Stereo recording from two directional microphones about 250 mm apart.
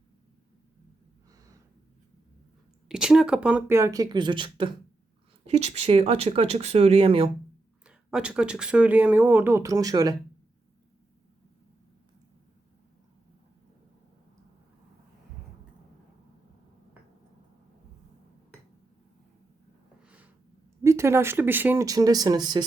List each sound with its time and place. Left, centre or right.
1.3 s snort: centre
2.9 s speech: centre; by 7.3 s right
7.9 s speech: centre
20.0 s a sound: centre
20.8 s speech: centre